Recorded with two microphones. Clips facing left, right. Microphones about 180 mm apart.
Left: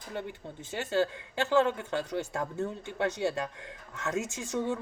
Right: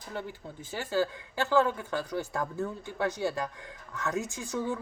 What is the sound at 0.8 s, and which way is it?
Speech, 25° left (ahead or behind).